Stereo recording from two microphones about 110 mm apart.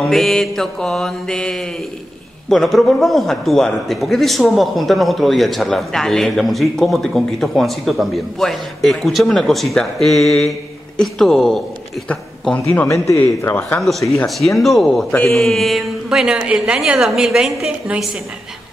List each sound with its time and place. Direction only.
0.0 s a man's voice: 5° left (ahead or behind)
12.9 s a man's voice: centre (ahead or behind)
13.2 s speech: 20° left (ahead or behind)
13.7 s a man's voice: centre (ahead or behind)